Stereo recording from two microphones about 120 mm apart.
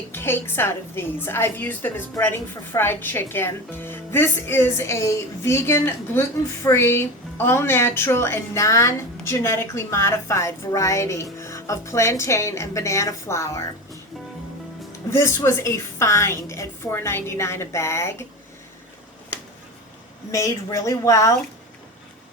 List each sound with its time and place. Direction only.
0.1 s a woman's voice: 20° left (ahead or behind)
15.1 s a woman's voice: 25° left (ahead or behind)
20.3 s a woman's voice: 25° left (ahead or behind)